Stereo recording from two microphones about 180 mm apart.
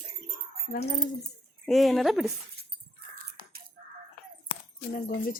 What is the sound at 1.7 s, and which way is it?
Speech, centre (ahead or behind).